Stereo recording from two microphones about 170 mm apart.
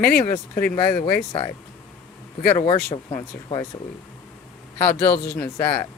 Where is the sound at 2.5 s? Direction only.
25° left (ahead or behind).